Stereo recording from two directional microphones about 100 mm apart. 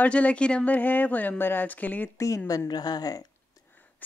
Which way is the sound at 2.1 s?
35° left (ahead or behind).